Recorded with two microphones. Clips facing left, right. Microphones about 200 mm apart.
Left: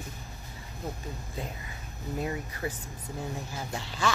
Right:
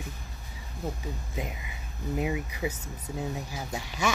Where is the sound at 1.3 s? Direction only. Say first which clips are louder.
Right 2 dB; 15° right (ahead or behind).